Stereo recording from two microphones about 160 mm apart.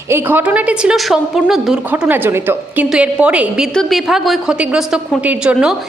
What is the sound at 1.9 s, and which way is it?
A woman's voice, 10° right (ahead or behind).